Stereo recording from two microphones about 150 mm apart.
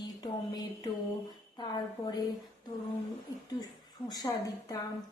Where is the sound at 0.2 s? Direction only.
25° left (ahead or behind).